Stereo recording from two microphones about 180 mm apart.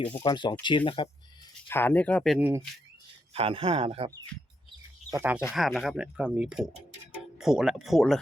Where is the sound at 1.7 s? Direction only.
10° left (ahead or behind).